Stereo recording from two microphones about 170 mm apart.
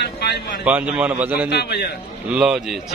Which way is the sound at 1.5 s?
70° left (ahead or behind).